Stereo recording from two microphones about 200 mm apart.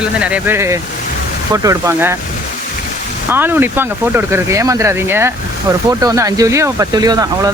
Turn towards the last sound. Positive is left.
turn(degrees=-20)  # may be behind; listen again after turning